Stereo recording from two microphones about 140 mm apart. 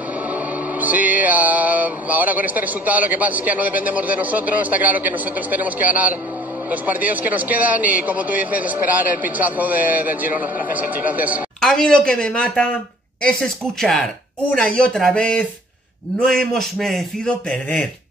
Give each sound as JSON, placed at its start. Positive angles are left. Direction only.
{"t": 0.3, "sound": "music", "side_deg": -10}
{"t": 6.7, "sound": "speech", "side_deg": -10}
{"t": 11.6, "sound": "speech", "side_deg": 5}